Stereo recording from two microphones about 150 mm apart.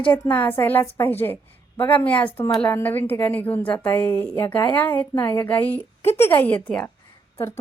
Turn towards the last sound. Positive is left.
turn(degrees=20)  # may be behind; listen again after turning